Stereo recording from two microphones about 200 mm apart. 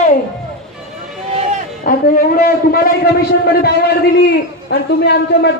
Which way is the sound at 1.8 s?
45° left (ahead or behind).